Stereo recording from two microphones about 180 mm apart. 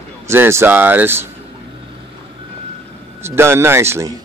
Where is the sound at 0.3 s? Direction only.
15° right (ahead or behind).